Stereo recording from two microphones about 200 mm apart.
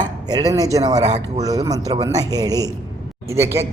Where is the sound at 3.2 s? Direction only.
15° right (ahead or behind).